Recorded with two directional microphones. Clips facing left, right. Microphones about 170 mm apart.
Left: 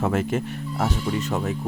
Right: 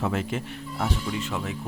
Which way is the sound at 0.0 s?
50° left (ahead or behind).